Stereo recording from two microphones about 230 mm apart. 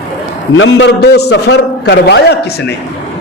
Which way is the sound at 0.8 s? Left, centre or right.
Left.